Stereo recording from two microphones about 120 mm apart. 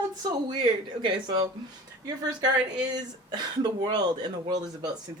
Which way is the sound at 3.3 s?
35° right (ahead or behind).